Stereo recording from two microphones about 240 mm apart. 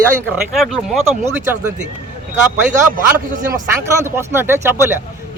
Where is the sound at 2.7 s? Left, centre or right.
Right.